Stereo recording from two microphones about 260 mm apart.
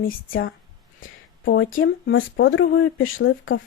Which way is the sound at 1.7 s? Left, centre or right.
Left.